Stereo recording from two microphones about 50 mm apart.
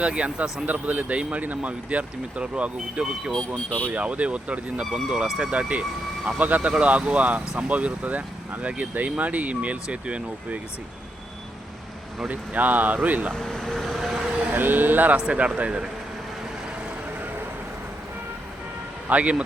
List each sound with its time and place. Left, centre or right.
0.0 s speech: right
3.7 s speech: left
3.9 s speech: right
12.3 s speech: right
13.3 s speech: centre
14.2 s vehicle: centre
14.5 s speech: right
15.2 s speech: right
19.0 s speech: right